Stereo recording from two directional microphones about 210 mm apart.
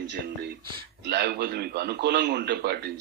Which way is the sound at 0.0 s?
55° right (ahead or behind).